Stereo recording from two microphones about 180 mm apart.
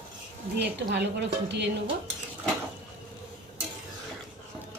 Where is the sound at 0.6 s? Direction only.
70° right (ahead or behind).